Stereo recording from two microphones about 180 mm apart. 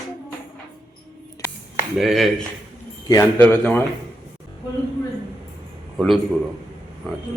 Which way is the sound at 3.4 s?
10° left (ahead or behind).